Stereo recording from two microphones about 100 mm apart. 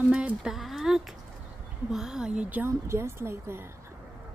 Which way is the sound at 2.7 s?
25° right (ahead or behind).